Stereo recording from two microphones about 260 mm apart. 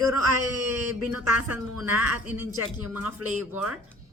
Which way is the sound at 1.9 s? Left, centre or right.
Right.